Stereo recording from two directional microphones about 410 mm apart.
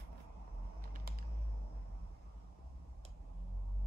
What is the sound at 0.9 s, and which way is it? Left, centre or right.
Typing, right.